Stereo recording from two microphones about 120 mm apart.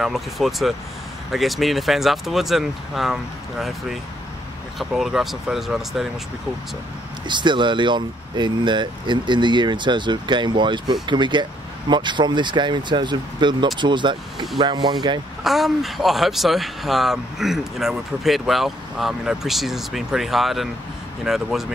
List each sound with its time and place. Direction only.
0.0 s speech: centre (ahead or behind)
7.2 s speech: 40° right (ahead or behind)
15.4 s speech: centre (ahead or behind)